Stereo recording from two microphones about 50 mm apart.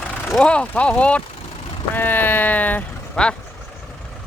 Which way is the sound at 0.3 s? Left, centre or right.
Left.